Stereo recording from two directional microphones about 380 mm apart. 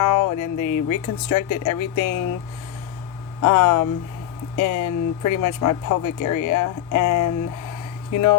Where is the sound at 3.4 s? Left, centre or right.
Left.